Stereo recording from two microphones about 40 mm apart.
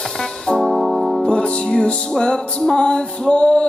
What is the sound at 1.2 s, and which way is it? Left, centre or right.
Music, left.